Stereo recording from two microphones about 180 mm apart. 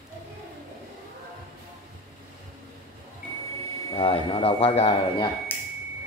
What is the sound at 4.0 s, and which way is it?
Speech, 30° left (ahead or behind).